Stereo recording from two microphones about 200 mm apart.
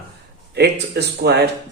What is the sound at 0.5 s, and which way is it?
Speech, 55° right (ahead or behind).